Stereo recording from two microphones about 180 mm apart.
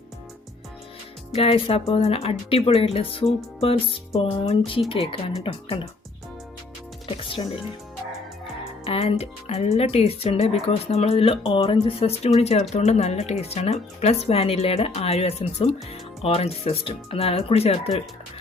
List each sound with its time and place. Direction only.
1.3 s speech: 35° left (ahead or behind)
7.2 s speech: 30° left (ahead or behind)
8.8 s speech: 35° left (ahead or behind)